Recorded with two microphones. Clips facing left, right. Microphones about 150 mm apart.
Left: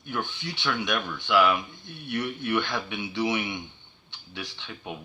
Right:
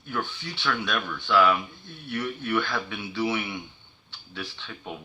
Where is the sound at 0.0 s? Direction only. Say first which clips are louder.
Even; 15° left (ahead or behind).